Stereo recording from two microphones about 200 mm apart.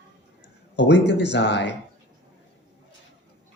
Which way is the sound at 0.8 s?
60° left (ahead or behind).